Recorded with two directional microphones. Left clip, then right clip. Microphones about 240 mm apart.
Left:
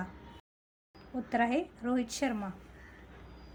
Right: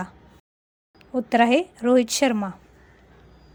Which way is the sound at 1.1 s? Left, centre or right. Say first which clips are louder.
Right 12 dB; right.